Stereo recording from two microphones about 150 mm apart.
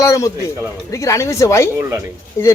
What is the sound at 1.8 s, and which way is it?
Speech, 15° right (ahead or behind).